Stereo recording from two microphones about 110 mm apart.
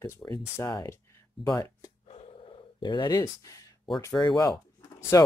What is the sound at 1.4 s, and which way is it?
Speech, 30° left (ahead or behind).